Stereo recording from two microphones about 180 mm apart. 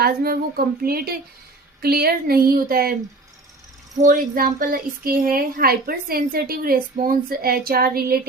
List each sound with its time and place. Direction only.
0.0 s speech: 55° right (ahead or behind)
4.0 s speech: 50° right (ahead or behind)